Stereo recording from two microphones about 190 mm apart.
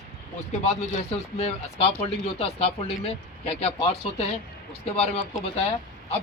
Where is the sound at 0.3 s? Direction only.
35° left (ahead or behind).